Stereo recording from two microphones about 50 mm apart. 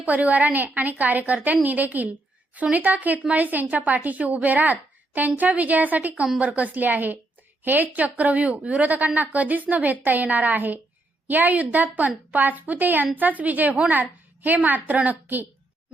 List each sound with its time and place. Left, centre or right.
0.0 s a woman's voice: right